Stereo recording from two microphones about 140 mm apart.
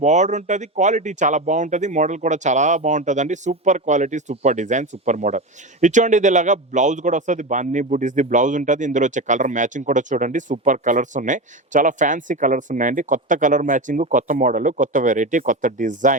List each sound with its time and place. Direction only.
0.0 s a man's voice: 60° right (ahead or behind)